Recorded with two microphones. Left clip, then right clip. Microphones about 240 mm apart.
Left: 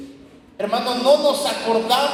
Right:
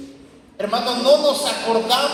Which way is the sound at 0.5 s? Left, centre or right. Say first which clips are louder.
Even; left.